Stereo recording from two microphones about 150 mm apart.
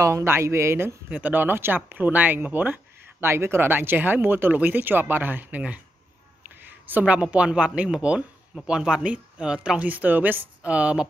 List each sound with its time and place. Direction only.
0.0 s speech: 20° right (ahead or behind)